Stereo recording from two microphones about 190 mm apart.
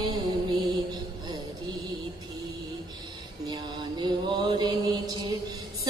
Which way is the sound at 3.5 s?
25° right (ahead or behind).